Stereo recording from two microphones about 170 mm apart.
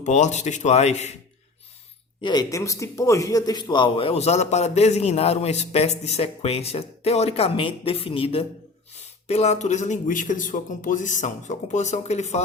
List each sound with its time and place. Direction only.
0.0 s speech: 45° left (ahead or behind)
2.2 s a man's voice: 25° left (ahead or behind); by 12.4 s 40° left (ahead or behind)